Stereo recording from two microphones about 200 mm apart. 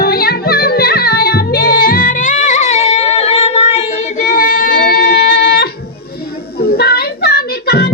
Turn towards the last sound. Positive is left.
turn(degrees=55)  # may be behind; listen again after turning